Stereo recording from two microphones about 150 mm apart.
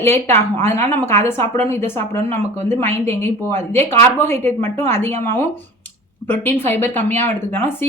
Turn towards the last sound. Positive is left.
turn(degrees=15)  # may be behind; listen again after turning